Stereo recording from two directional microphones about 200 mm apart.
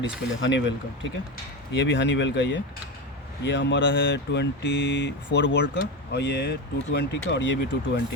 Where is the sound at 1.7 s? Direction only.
65° left (ahead or behind).